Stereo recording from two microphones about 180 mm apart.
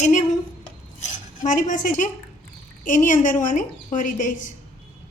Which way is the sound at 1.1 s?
45° left (ahead or behind).